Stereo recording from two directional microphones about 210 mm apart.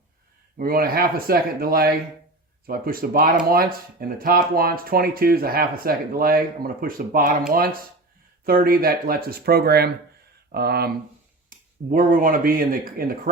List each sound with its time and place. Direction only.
0.6 s speech: 45° right (ahead or behind)